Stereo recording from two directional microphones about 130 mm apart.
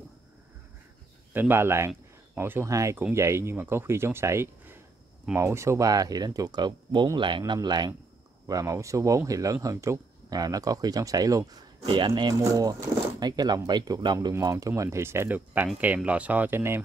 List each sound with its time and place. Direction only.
1.3 s speech: 15° right (ahead or behind)